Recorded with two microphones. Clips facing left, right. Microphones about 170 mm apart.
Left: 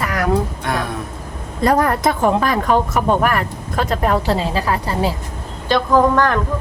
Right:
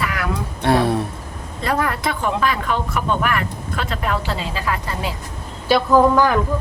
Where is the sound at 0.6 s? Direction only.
30° right (ahead or behind).